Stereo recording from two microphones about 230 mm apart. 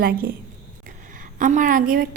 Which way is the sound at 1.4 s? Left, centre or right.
Right.